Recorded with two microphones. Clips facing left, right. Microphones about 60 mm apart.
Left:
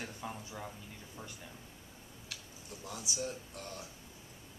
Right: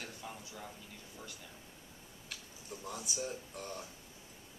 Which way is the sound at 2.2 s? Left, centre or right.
Centre.